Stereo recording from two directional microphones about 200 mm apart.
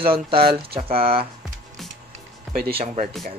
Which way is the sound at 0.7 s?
30° right (ahead or behind).